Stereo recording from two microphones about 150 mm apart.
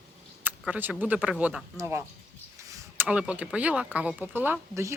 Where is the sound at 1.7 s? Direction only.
15° right (ahead or behind).